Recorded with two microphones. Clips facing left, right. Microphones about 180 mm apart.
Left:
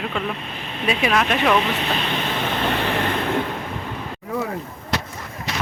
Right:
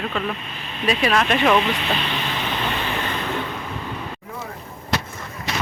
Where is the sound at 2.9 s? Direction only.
65° left (ahead or behind).